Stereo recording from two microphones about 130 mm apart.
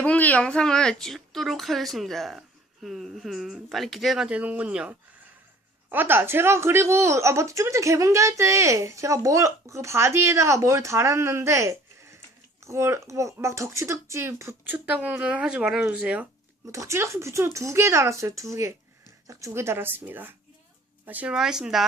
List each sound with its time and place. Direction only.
0.0 s speech: 10° left (ahead or behind); by 16.2 s 10° right (ahead or behind)
16.6 s speech: 25° right (ahead or behind); by 21.8 s 5° right (ahead or behind)